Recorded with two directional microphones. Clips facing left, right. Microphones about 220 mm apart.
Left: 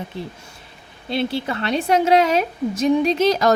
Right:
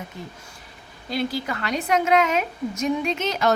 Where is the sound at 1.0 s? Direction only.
25° left (ahead or behind).